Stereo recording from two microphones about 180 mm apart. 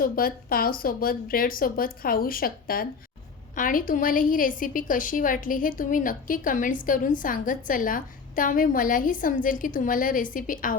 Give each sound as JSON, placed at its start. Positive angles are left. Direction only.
{"t": 0.0, "sound": "a woman's voice", "side_deg": 55}